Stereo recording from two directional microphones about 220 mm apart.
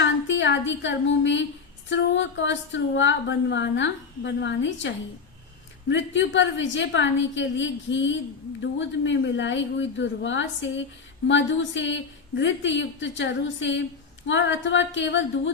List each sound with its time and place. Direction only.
0.0 s a woman's voice: 55° left (ahead or behind)